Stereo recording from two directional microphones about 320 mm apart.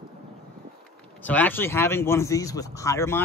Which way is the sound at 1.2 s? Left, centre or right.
Centre.